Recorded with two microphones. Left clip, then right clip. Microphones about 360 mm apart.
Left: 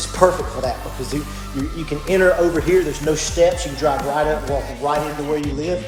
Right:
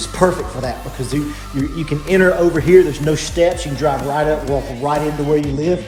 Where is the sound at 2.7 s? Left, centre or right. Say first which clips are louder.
Right 6 dB; centre.